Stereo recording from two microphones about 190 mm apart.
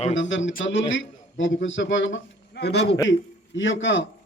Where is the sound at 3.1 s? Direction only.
75° left (ahead or behind).